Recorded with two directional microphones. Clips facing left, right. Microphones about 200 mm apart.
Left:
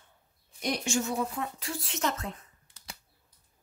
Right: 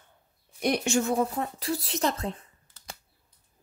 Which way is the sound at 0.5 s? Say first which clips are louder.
Right 5 dB; 60° right (ahead or behind).